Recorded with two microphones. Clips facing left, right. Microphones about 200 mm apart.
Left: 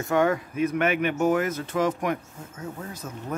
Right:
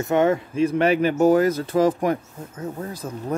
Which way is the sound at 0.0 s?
25° right (ahead or behind).